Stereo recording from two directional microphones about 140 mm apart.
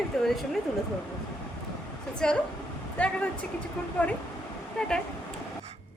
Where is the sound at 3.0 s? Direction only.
10° left (ahead or behind).